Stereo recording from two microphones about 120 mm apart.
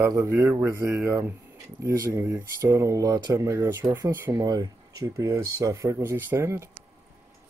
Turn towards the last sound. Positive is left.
turn(degrees=-20)  # may be behind; listen again after turning